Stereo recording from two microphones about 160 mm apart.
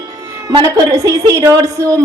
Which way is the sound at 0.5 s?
20° right (ahead or behind).